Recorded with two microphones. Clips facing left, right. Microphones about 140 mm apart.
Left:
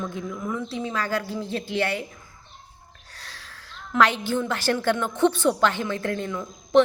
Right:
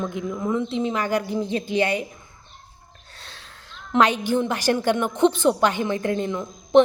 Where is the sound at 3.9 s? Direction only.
20° right (ahead or behind).